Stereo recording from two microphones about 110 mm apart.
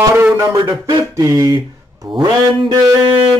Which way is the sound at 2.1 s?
45° right (ahead or behind).